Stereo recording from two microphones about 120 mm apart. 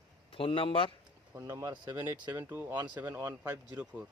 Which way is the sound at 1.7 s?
35° right (ahead or behind).